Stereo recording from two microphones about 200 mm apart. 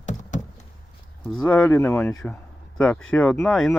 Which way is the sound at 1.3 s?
Centre (ahead or behind).